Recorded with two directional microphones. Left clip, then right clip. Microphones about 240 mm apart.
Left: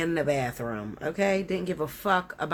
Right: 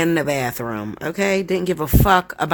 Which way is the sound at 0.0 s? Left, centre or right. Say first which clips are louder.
Right 7 dB; right.